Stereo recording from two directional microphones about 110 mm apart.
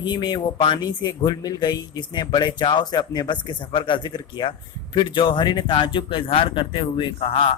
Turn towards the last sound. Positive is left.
turn(degrees=60)  # may be behind; listen again after turning